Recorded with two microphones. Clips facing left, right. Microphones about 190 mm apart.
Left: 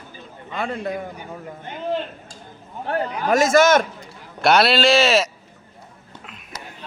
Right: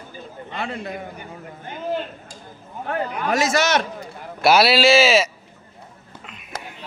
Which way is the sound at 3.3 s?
50° left (ahead or behind).